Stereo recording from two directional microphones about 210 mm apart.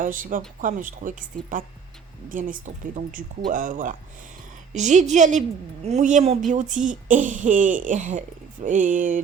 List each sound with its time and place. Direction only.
0.0 s a woman's voice: 40° right (ahead or behind)